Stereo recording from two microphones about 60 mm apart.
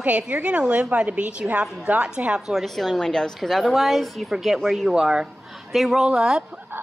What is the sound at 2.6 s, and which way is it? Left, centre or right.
A woman's voice, centre.